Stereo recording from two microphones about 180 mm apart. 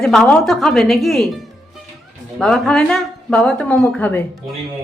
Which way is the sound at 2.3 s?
Centre (ahead or behind).